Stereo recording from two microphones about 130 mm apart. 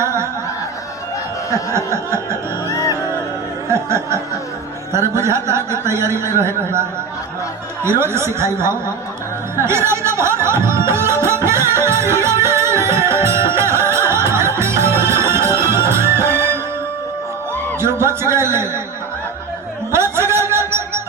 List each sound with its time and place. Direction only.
0.0 s music: 20° right (ahead or behind)
1.7 s speech: 20° right (ahead or behind)
2.6 s music: 25° left (ahead or behind)
3.7 s speech: 20° right (ahead or behind)
7.9 s speech: 20° right (ahead or behind)
9.6 s music: 20° right (ahead or behind)
17.7 s speech: 20° right (ahead or behind)
19.9 s music: 20° right (ahead or behind)